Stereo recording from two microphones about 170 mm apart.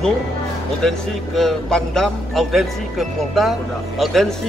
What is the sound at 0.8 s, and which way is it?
A man's voice, centre (ahead or behind).